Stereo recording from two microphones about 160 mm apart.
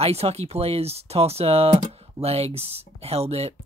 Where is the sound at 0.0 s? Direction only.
40° right (ahead or behind).